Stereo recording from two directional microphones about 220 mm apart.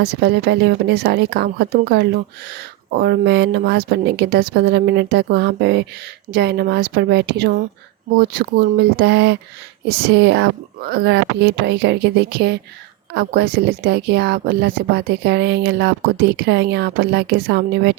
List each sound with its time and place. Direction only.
0.0 s speech: 50° right (ahead or behind)